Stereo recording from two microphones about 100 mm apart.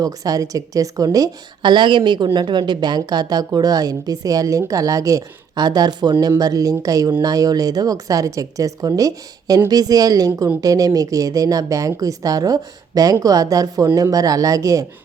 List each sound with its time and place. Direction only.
0.0 s a woman's voice: 40° right (ahead or behind)
1.7 s a woman's voice: 55° right (ahead or behind); by 14.8 s 35° right (ahead or behind)